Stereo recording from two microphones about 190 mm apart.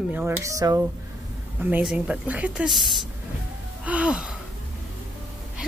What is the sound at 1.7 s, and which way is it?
Speech, 5° right (ahead or behind).